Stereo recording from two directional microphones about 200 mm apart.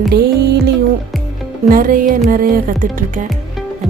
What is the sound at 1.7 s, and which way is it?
Music, 45° right (ahead or behind).